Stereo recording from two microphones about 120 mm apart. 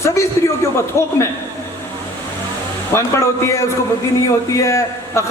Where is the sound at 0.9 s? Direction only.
25° left (ahead or behind).